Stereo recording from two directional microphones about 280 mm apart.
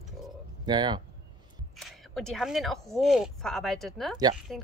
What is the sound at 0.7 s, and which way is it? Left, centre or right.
Speech, centre.